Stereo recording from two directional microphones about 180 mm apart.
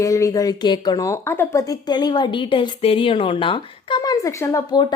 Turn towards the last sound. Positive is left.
turn(degrees=20)  # may be behind; listen again after turning